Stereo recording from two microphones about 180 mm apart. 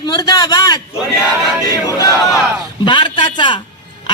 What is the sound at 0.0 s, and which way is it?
Speech, 20° left (ahead or behind).